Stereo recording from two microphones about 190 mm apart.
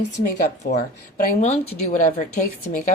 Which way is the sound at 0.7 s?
40° left (ahead or behind).